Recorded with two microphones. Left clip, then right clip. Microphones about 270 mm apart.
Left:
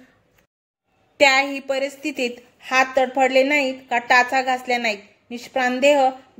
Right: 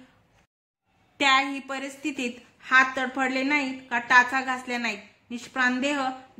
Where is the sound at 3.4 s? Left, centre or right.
Right.